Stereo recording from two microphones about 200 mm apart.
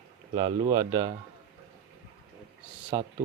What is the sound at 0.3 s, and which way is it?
Speech, 20° right (ahead or behind).